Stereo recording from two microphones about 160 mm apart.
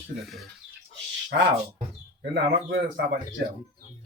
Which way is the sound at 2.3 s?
90° right.